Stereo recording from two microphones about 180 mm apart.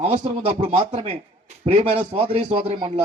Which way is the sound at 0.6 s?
35° right (ahead or behind).